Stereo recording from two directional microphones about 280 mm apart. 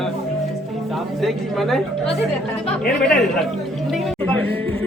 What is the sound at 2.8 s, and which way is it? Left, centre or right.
Speech, centre.